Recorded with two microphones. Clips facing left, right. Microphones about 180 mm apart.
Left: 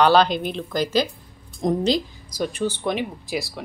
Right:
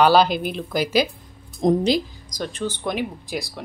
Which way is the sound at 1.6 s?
25° right (ahead or behind).